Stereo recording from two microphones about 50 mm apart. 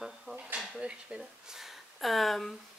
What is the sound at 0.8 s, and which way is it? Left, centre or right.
Speech, centre.